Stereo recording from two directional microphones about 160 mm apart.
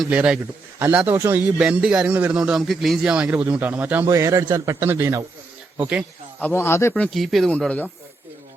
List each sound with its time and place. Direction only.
0.0 s a man's voice: 5° right (ahead or behind)
6.4 s speech: 15° left (ahead or behind)